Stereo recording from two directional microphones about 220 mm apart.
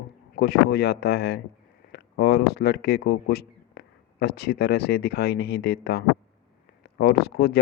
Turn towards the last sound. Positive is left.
turn(degrees=50)  # may be behind; listen again after turning